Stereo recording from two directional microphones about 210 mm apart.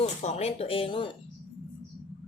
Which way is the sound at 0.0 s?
30° left (ahead or behind).